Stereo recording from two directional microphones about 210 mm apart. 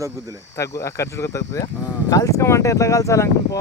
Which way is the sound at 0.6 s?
15° left (ahead or behind).